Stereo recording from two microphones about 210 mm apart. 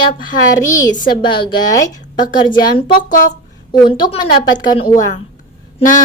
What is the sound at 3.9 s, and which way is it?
Speech, 20° left (ahead or behind).